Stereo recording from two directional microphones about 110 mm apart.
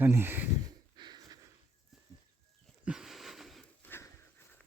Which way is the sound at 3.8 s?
20° left (ahead or behind).